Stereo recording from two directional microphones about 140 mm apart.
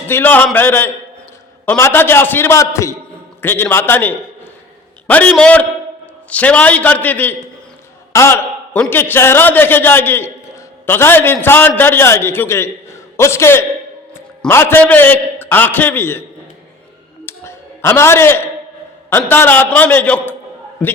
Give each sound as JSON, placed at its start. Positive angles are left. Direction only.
{"t": 0.1, "sound": "a man's voice", "side_deg": 15}
{"t": 17.2, "sound": "a sound", "side_deg": 20}
{"t": 19.1, "sound": "a man's voice", "side_deg": 15}